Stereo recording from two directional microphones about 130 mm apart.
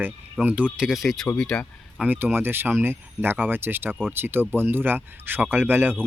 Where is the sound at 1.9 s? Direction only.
15° right (ahead or behind).